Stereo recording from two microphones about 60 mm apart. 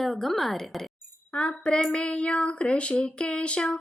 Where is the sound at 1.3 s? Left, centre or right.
Centre.